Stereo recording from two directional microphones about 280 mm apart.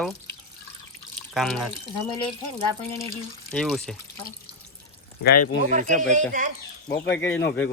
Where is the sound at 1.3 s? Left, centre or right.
Centre.